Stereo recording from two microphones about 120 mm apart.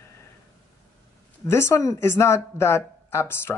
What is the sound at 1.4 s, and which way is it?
Speech, 20° left (ahead or behind).